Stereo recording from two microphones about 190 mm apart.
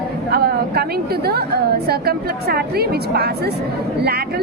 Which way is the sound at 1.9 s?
55° right (ahead or behind).